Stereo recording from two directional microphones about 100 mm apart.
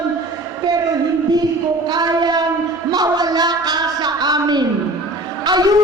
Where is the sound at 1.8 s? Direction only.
45° right (ahead or behind).